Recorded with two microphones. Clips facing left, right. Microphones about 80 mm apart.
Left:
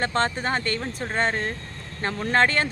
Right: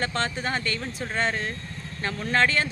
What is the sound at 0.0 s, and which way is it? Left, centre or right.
Speech, left.